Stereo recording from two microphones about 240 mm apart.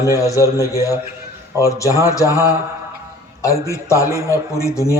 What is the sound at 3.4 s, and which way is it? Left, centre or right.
Speech, centre.